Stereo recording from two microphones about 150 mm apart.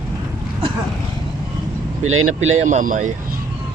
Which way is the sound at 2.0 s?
50° right (ahead or behind).